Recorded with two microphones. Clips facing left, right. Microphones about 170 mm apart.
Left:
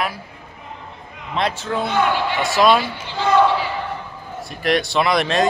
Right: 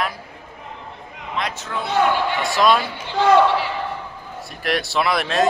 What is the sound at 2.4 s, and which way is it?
Speech, centre (ahead or behind).